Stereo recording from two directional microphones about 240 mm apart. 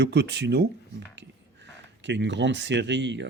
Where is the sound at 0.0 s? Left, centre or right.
Right.